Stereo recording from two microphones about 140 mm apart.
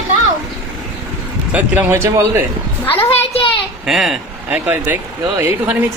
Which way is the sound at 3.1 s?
45° left (ahead or behind).